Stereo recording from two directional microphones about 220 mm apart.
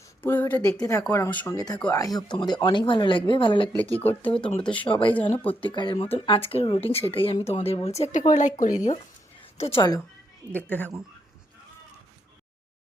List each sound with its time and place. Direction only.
0.2 s speech: 10° left (ahead or behind)
4.0 s speech: 10° left (ahead or behind)
5.6 s speech: 20° left (ahead or behind)
10.5 s speech: 5° left (ahead or behind)